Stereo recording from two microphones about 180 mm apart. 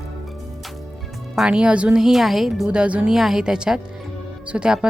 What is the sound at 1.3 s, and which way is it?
Speech, 5° right (ahead or behind).